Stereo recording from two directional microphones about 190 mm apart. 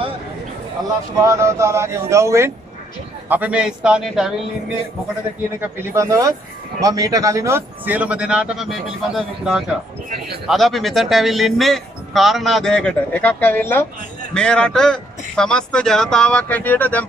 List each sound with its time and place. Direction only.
0.8 s speech: 20° right (ahead or behind); by 4.3 s centre (ahead or behind)
5.8 s speech: 15° right (ahead or behind)
10.0 s a man's voice: 55° right (ahead or behind)
10.4 s speech: centre (ahead or behind)